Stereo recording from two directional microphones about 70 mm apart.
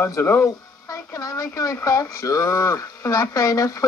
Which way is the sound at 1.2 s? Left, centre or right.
Left.